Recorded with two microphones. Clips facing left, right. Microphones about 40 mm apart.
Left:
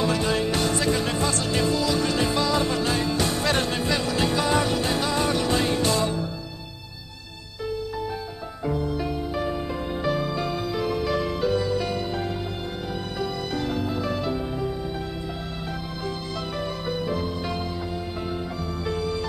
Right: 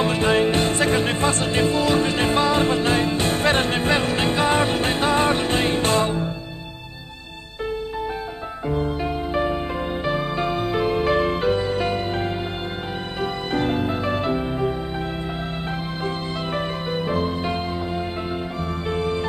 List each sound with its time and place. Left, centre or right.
0.0 s music: right
8.7 s music: right
16.5 s music: right
18.9 s music: right